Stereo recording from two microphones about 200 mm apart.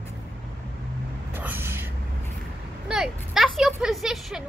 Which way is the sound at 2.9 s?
Centre (ahead or behind).